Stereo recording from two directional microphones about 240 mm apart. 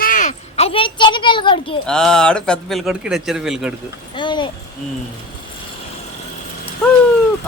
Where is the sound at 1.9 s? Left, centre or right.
Centre.